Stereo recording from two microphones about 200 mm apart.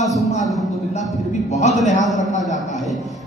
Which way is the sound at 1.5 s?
35° left (ahead or behind).